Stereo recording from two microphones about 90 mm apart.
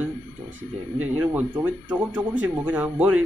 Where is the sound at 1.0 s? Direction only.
20° right (ahead or behind).